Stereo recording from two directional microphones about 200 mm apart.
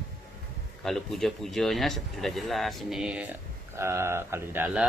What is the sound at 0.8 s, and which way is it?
Speech, centre (ahead or behind).